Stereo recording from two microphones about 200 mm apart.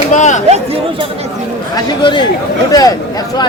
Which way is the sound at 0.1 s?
35° left (ahead or behind).